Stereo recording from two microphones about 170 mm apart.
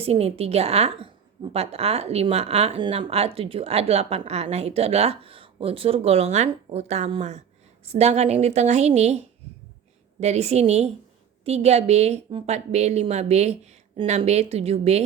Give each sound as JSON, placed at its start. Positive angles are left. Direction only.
{"t": 0.0, "sound": "speech", "side_deg": -35}